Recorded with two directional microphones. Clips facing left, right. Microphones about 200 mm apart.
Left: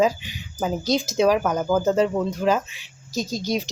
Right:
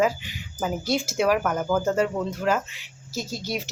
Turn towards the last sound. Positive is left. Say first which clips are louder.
# left 5 dB
turn(degrees=15)  # may be behind; listen again after turning